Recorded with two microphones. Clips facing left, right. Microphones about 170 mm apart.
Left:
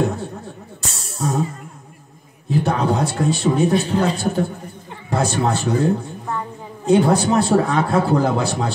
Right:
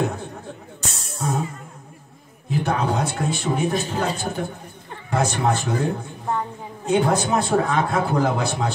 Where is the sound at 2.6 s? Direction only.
35° left (ahead or behind).